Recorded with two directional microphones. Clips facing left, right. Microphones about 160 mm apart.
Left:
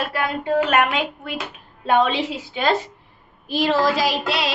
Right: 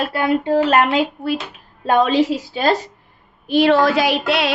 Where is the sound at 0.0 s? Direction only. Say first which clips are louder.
Right 6 dB; 30° right (ahead or behind).